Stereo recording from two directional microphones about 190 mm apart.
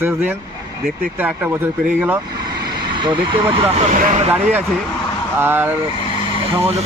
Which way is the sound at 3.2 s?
30° right (ahead or behind).